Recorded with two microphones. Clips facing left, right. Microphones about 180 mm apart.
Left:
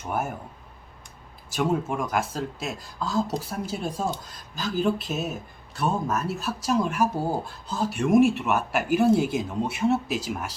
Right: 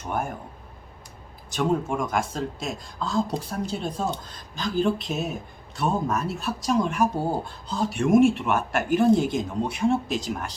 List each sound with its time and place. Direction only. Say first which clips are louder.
0.1 s speech: even; 5° left (ahead or behind)
1.5 s speech: right 1 dB; 5° left (ahead or behind)